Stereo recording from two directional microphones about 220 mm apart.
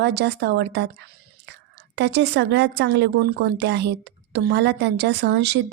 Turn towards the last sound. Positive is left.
turn(degrees=-50)  # may be behind; listen again after turning